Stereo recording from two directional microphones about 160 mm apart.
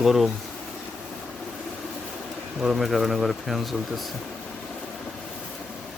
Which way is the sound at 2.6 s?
Centre (ahead or behind).